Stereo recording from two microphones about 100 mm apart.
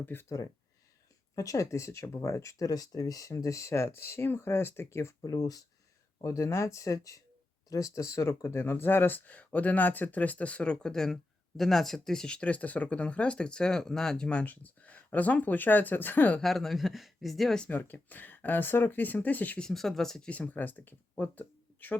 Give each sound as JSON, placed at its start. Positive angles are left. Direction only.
{"t": 0.0, "sound": "speech", "side_deg": 20}
{"t": 1.4, "sound": "speech", "side_deg": 35}
{"t": 5.2, "sound": "speech", "side_deg": 40}
{"t": 16.4, "sound": "speech", "side_deg": 0}
{"t": 17.7, "sound": "speech", "side_deg": 20}